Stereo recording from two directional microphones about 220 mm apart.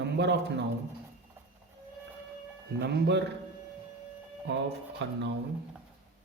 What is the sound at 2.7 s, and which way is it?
Speech, 50° right (ahead or behind).